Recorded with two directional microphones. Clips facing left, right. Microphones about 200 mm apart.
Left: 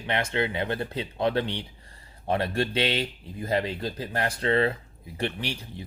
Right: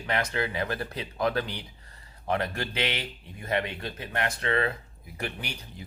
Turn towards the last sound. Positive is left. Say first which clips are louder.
# left 5 dB
turn(degrees=30)  # may be behind; listen again after turning